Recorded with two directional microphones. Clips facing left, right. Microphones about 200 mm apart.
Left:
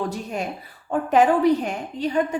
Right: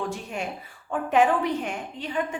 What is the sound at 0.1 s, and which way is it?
A woman's voice, 40° left (ahead or behind).